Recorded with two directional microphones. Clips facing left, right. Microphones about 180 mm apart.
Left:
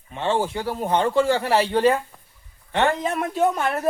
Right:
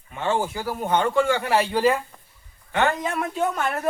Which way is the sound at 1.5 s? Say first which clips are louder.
Left 1 dB; centre (ahead or behind).